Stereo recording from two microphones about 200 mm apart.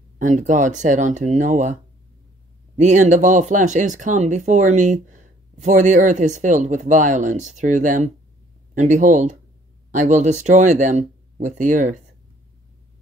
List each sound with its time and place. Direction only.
0.2 s speech: 35° right (ahead or behind)
2.8 s speech: 35° right (ahead or behind)